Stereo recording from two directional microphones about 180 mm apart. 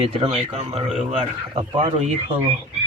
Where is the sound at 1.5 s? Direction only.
25° right (ahead or behind).